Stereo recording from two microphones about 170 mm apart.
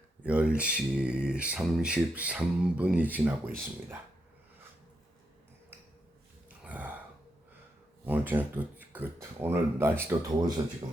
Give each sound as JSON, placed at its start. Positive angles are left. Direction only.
{"t": 0.2, "sound": "speech", "side_deg": -5}
{"t": 6.7, "sound": "gasp", "side_deg": -10}
{"t": 8.0, "sound": "speech", "side_deg": -10}